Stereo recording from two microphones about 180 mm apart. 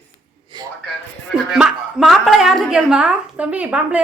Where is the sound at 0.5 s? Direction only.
25° right (ahead or behind).